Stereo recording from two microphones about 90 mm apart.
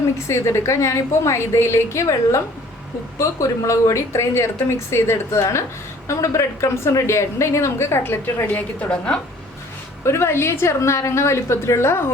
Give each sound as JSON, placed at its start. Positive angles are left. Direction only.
{"t": 0.3, "sound": "a woman's voice", "side_deg": 30}
{"t": 10.0, "sound": "a woman's voice", "side_deg": 30}